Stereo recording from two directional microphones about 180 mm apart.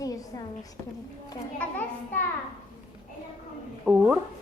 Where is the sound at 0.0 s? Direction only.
20° left (ahead or behind).